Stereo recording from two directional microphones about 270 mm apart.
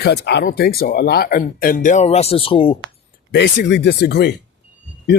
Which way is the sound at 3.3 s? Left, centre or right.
Left.